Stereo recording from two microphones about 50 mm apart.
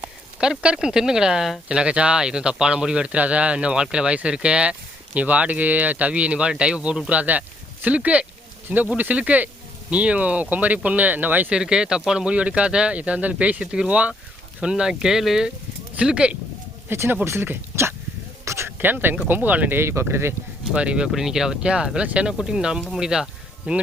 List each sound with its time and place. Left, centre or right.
0.4 s speech: centre
1.6 s speech: right
7.1 s speech: right
11.5 s speech: centre
16.0 s speech: right
16.9 s speech: right
18.4 s a sound: right
18.8 s speech: right
19.7 s speech: right
20.7 s speech: right
21.1 s speech: centre
22.0 s speech: right
22.3 s speech: centre